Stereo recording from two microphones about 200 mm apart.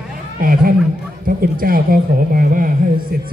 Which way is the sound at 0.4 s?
45° right (ahead or behind).